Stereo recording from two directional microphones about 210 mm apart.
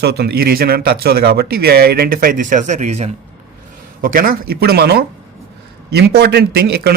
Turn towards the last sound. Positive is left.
turn(degrees=-50)  # may be behind; listen again after turning